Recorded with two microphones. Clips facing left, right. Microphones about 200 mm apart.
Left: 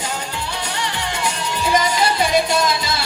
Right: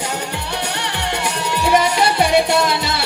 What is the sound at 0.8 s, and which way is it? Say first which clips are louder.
Music: right 1 dB; 65° right (ahead or behind).